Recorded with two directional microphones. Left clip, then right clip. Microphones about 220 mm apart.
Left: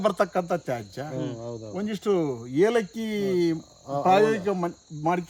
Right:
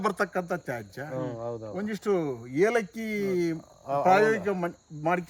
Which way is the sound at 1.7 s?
15° left (ahead or behind).